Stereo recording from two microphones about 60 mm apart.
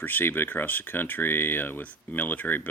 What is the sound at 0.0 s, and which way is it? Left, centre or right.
Speech, left.